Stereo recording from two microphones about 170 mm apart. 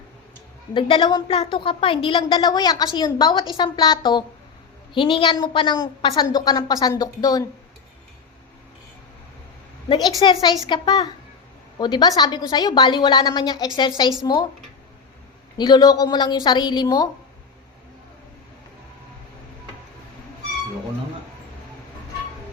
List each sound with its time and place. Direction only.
0.7 s a woman's voice: 30° left (ahead or behind)
9.9 s a woman's voice: 25° left (ahead or behind)
15.5 s a woman's voice: 25° left (ahead or behind)